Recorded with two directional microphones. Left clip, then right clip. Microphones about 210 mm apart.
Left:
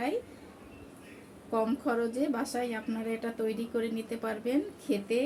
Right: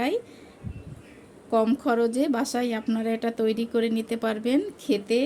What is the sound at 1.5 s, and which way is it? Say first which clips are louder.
Speech: right 7 dB; 50° right (ahead or behind).